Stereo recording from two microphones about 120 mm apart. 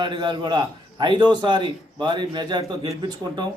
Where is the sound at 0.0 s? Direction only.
40° right (ahead or behind).